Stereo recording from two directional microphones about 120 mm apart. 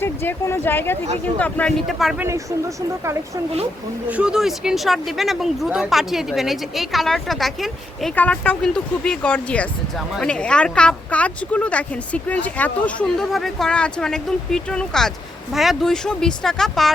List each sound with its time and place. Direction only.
0.0 s speech: 20° left (ahead or behind)
1.9 s speech: centre (ahead or behind)
2.1 s speech: 25° right (ahead or behind)
4.1 s speech: 5° right (ahead or behind)
8.1 s speech: 15° left (ahead or behind)